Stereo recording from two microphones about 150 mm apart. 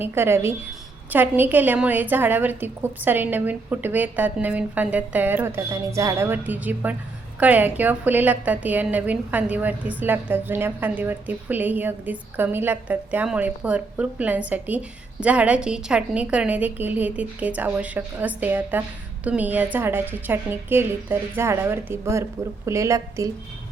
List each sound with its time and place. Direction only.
0.0 s a woman's voice: 15° right (ahead or behind)